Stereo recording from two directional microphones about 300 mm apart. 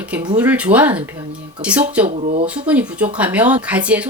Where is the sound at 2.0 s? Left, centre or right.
Right.